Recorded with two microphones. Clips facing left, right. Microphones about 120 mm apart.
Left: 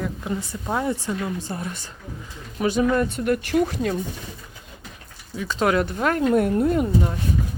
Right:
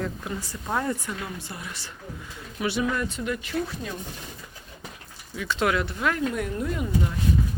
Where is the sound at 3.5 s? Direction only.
80° left.